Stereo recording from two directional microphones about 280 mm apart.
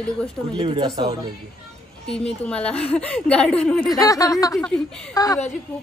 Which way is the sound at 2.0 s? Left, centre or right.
Centre.